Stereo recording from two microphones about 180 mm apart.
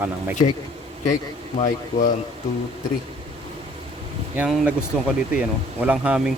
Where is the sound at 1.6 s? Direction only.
45° left (ahead or behind).